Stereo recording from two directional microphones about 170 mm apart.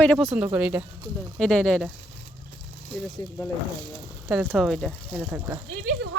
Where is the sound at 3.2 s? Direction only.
20° left (ahead or behind).